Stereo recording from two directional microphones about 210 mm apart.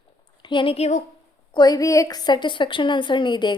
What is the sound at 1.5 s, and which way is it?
A woman's voice, 20° left (ahead or behind).